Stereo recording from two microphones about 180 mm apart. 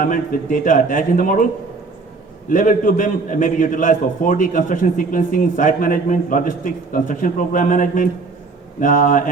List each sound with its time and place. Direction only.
0.0 s a man's voice: 50° left (ahead or behind)
2.5 s a man's voice: 50° left (ahead or behind)